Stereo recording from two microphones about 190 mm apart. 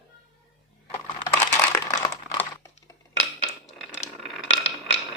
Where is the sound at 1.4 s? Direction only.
10° left (ahead or behind).